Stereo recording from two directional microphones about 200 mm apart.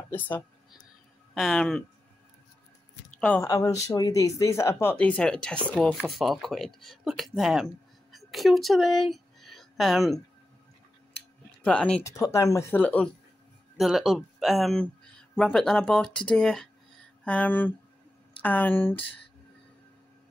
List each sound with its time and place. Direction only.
1.3 s speech: centre (ahead or behind)
3.2 s speech: 5° left (ahead or behind)
3.4 s speech: 15° left (ahead or behind); by 10.2 s centre (ahead or behind)
11.6 s speech: 5° left (ahead or behind)